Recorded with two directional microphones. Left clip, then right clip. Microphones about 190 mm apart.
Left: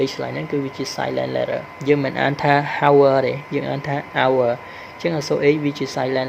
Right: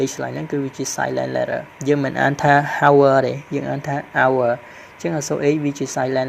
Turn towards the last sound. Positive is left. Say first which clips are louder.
# right 1 dB
turn(degrees=-25)  # may be behind; listen again after turning